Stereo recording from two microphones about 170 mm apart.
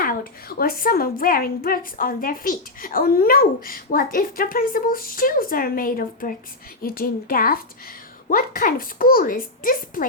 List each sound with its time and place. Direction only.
0.0 s a woman's voice: 60° left (ahead or behind)